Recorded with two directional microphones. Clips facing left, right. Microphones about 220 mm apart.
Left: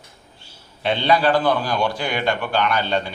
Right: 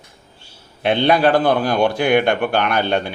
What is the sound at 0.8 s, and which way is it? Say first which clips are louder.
A man's voice: right 3 dB; 55° right (ahead or behind).